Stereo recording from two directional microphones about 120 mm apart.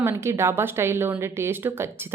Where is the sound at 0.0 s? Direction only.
20° right (ahead or behind).